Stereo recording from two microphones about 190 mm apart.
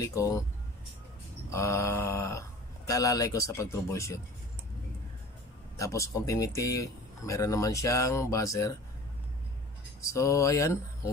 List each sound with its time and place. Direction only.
0.0 s speech: 15° left (ahead or behind)
1.5 s speech: 15° left (ahead or behind)
5.8 s speech: 15° left (ahead or behind)
10.0 s speech: 15° left (ahead or behind)